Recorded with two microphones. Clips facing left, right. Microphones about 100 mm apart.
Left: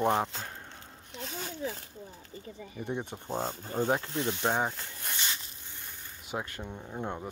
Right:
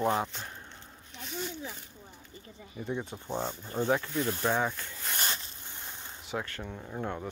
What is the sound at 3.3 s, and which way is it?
Speech, 45° left (ahead or behind).